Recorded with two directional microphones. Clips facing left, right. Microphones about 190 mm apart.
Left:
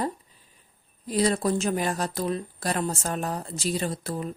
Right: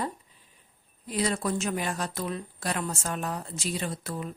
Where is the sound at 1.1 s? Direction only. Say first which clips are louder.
Left 5 dB; 35° left (ahead or behind).